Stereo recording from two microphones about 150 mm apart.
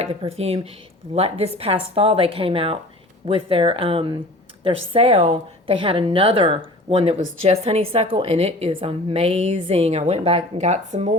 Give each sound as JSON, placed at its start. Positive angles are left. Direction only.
{"t": 0.0, "sound": "a woman's voice", "side_deg": -40}